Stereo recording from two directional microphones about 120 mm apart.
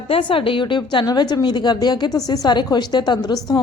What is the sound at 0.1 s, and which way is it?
A woman's voice, 45° left (ahead or behind).